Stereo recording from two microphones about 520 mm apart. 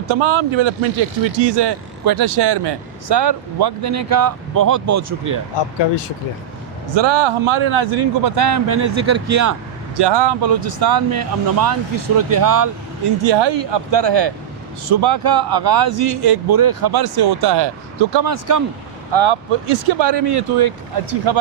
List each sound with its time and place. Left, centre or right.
0.1 s speech: right
3.9 s speech: right
6.9 s speech: right
8.7 s speech: right
10.0 s speech: right
13.2 s speech: right
19.1 s speech: right